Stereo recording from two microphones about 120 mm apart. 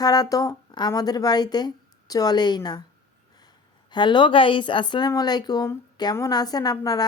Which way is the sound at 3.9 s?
40° left (ahead or behind).